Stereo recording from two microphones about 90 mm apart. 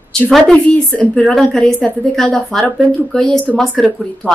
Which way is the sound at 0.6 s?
15° left (ahead or behind).